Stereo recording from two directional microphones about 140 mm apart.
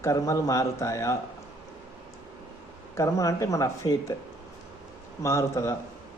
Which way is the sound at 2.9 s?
20° left (ahead or behind).